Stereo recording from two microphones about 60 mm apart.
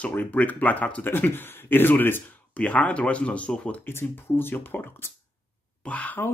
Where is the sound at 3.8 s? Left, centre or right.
Left.